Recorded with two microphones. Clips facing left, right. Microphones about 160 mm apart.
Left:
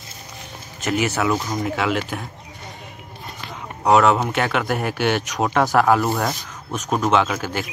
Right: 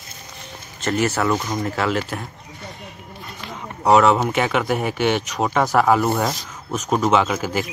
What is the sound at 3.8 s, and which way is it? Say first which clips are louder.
Speech: right 1 dB; centre (ahead or behind).